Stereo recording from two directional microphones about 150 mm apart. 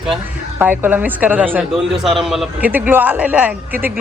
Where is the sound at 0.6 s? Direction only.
15° right (ahead or behind).